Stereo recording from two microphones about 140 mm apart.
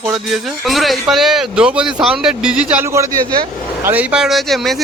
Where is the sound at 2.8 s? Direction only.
20° right (ahead or behind).